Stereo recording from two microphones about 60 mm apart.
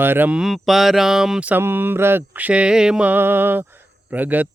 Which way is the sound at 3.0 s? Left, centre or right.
Right.